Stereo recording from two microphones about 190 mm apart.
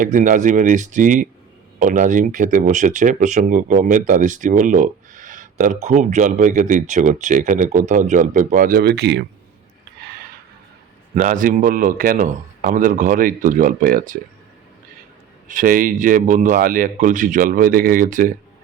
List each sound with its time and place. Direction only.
0.0 s speech: 45° right (ahead or behind); by 9.2 s 60° right (ahead or behind)
11.1 s speech: 40° right (ahead or behind)
15.4 s speech: 45° right (ahead or behind)